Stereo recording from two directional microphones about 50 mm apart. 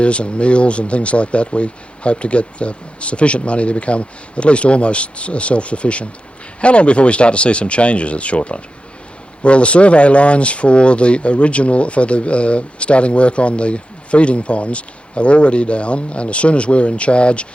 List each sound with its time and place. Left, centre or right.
0.0 s speech: left